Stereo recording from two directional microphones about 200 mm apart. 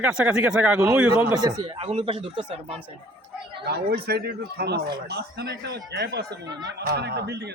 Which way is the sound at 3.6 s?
55° right (ahead or behind).